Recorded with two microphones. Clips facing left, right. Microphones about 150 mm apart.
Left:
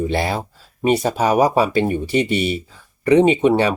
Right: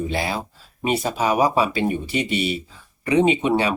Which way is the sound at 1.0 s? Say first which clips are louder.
Left 1 dB; 40° left (ahead or behind).